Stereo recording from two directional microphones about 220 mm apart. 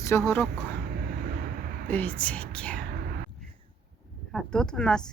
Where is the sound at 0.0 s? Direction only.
10° left (ahead or behind).